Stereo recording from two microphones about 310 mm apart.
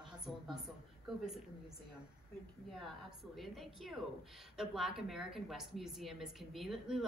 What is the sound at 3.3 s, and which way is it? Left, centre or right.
A woman's voice, centre.